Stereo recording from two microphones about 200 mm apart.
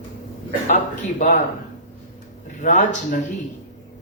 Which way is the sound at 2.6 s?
40° left (ahead or behind).